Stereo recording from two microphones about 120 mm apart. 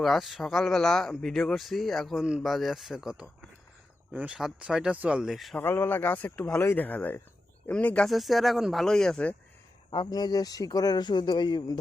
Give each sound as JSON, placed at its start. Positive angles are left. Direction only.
{"t": 0.0, "sound": "speech", "side_deg": 0}
{"t": 5.5, "sound": "speech", "side_deg": 20}
{"t": 8.0, "sound": "speech", "side_deg": 0}
{"t": 9.9, "sound": "speech", "side_deg": 35}